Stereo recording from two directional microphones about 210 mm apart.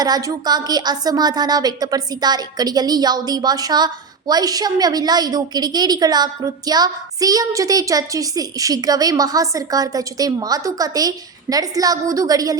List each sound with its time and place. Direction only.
0.0 s a woman's voice: 15° right (ahead or behind)